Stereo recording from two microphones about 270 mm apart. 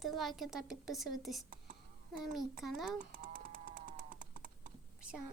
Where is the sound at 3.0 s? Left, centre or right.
Right.